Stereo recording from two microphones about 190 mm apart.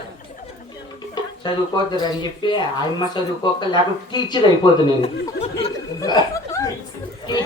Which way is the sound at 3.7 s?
25° left (ahead or behind).